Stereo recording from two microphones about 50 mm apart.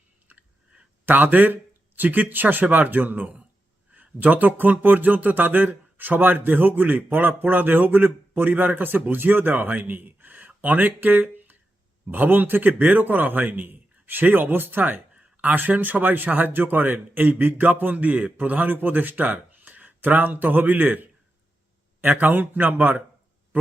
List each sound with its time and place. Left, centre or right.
1.0 s speech: right
15.1 s speech: right